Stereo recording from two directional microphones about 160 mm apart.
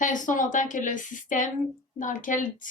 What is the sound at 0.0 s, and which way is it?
A woman's voice, 55° left (ahead or behind).